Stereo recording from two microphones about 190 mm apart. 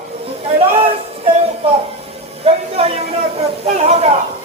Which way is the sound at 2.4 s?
30° right (ahead or behind).